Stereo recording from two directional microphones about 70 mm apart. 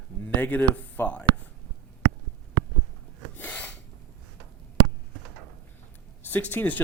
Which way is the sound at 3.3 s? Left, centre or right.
Left.